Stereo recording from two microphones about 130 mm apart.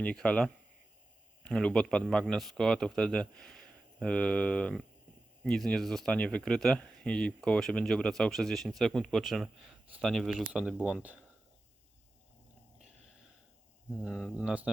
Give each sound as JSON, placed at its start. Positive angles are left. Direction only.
{"t": 0.0, "sound": "speech", "side_deg": 10}
{"t": 14.0, "sound": "speech", "side_deg": -5}